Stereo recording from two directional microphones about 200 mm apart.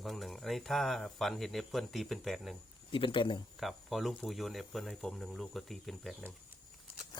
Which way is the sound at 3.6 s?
Centre (ahead or behind).